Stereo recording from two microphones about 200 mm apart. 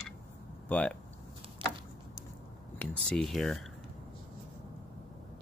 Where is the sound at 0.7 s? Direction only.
5° left (ahead or behind).